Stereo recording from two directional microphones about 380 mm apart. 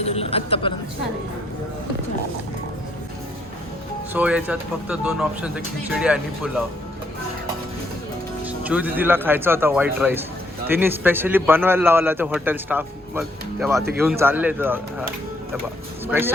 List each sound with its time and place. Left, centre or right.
0.0 s a sound: centre
4.1 s a man's voice: centre
8.4 s a man's voice: centre